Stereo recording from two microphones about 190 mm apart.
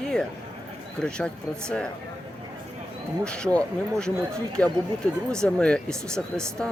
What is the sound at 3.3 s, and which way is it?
Speech, 5° left (ahead or behind).